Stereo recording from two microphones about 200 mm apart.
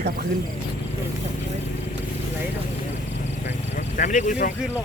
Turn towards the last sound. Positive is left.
turn(degrees=40)  # may be behind; listen again after turning